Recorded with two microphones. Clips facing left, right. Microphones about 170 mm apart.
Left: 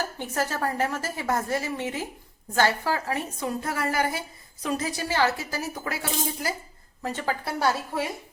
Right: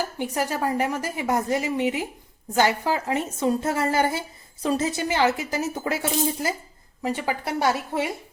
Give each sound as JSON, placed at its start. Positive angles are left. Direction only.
{"t": 0.2, "sound": "a woman's voice", "side_deg": -15}
{"t": 7.0, "sound": "a woman's voice", "side_deg": -10}